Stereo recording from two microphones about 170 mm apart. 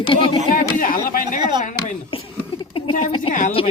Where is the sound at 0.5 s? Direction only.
55° left (ahead or behind).